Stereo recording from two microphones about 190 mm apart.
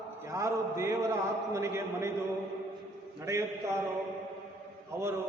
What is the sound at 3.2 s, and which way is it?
Mantra, 15° right (ahead or behind).